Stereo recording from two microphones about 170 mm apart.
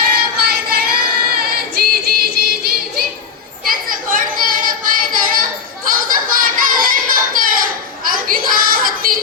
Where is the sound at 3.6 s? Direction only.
55° right (ahead or behind).